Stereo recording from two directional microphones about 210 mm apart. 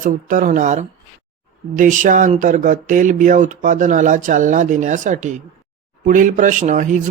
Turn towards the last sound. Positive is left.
turn(degrees=-35)  # may be behind; listen again after turning